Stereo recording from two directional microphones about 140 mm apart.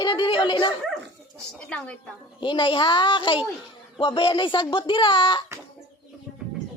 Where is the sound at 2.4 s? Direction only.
35° left (ahead or behind).